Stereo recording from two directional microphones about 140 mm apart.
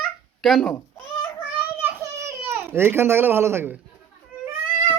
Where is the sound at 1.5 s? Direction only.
15° right (ahead or behind).